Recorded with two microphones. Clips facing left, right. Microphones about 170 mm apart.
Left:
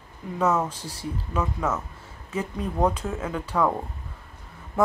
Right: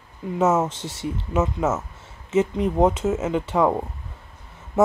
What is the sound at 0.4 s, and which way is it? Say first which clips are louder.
Speech: right 4 dB; 25° right (ahead or behind).